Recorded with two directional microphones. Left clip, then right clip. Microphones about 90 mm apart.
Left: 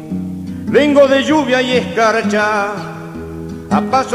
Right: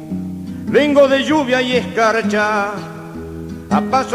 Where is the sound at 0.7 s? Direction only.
40° right (ahead or behind).